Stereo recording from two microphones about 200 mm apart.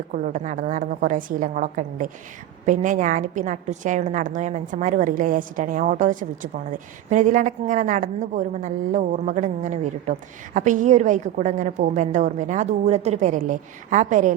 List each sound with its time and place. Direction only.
0.1 s a woman's voice: 40° right (ahead or behind)